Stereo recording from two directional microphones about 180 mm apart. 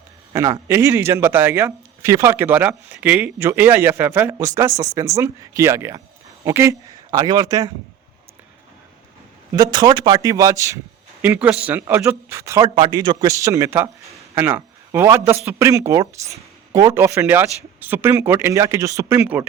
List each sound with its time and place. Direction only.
0.3 s a man's voice: 15° right (ahead or behind)
9.6 s a man's voice: 25° right (ahead or behind)